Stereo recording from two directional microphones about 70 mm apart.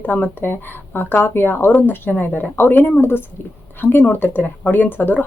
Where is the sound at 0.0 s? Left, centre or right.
Left.